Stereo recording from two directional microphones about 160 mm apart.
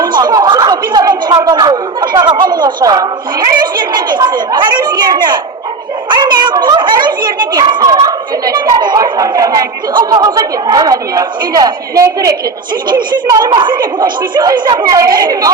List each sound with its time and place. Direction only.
0.0 s a child's voice: 25° right (ahead or behind)